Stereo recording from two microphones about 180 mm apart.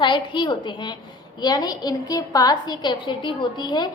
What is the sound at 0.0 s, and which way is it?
A woman's voice, 25° left (ahead or behind).